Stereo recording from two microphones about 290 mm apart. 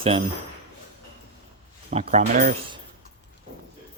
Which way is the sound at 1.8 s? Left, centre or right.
Right.